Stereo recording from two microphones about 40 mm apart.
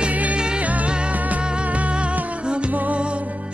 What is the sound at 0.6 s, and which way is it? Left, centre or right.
Music, right.